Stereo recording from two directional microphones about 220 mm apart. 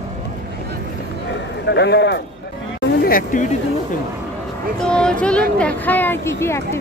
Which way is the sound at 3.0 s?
40° left (ahead or behind).